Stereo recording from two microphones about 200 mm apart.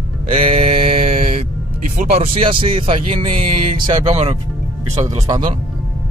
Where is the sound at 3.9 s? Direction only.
30° right (ahead or behind).